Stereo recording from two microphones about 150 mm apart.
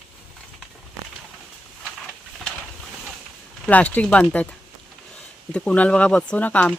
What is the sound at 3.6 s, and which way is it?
Speech, 10° left (ahead or behind).